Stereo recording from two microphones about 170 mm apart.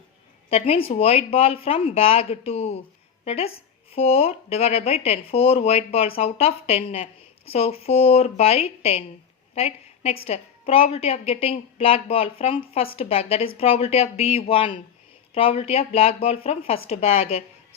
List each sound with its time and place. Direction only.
0.5 s speech: 35° left (ahead or behind)